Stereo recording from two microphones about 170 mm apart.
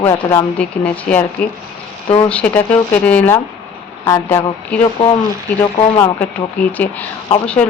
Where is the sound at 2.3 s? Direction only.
10° left (ahead or behind).